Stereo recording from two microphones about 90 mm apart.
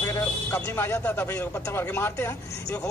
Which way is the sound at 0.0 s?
30° left (ahead or behind).